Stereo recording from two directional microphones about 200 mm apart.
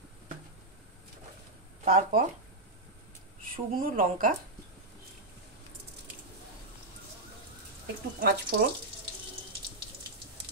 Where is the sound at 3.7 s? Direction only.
45° right (ahead or behind).